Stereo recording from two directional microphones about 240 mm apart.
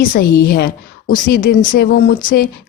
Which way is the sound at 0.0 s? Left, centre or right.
Left.